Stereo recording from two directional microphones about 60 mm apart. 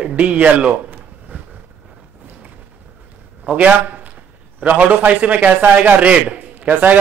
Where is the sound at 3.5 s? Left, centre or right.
Right.